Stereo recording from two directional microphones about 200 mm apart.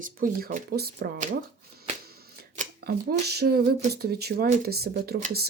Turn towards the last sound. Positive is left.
turn(degrees=-50)  # may be behind; listen again after turning